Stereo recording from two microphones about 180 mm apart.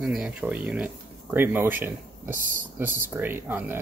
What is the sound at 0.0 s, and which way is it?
Speech, 5° right (ahead or behind).